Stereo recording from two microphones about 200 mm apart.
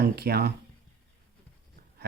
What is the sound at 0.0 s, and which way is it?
Speech, 55° right (ahead or behind).